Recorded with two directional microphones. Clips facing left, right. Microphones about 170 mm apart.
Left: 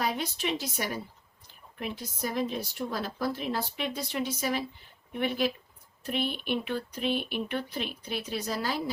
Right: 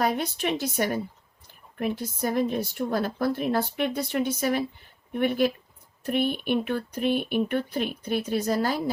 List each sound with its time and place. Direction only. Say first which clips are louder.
0.0 s a woman's voice: right 5 dB; 50° right (ahead or behind)